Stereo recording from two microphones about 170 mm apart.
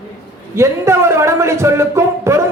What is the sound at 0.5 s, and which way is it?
A man's voice, 15° right (ahead or behind).